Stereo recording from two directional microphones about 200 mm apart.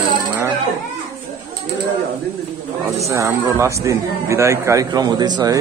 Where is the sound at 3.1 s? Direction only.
15° right (ahead or behind).